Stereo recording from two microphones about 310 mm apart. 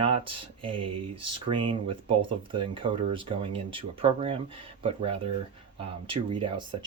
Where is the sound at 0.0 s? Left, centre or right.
Centre.